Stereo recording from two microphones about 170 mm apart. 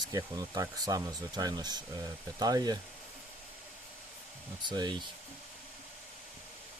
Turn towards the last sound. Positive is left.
turn(degrees=-25)  # may be behind; listen again after turning